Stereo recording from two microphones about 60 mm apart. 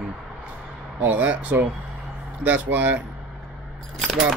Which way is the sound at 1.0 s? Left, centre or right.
Right.